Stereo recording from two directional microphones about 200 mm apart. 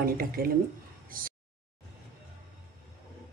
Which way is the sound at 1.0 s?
45° right (ahead or behind).